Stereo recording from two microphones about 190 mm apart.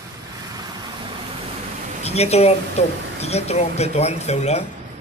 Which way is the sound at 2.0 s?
35° left (ahead or behind).